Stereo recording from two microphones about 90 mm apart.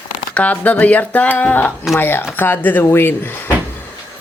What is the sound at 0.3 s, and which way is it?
Speech, 15° left (ahead or behind).